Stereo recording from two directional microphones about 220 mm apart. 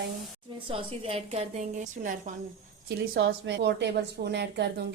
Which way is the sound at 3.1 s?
50° right (ahead or behind).